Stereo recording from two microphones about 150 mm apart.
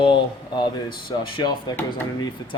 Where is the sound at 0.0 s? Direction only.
30° left (ahead or behind).